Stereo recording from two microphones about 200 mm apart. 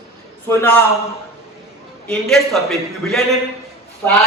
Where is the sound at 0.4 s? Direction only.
10° left (ahead or behind).